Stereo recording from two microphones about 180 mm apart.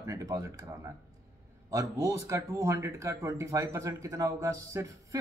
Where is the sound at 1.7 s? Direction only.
20° right (ahead or behind).